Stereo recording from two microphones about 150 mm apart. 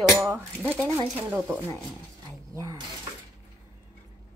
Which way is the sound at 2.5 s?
20° right (ahead or behind).